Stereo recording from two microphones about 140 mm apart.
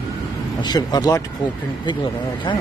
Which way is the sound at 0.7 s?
30° left (ahead or behind).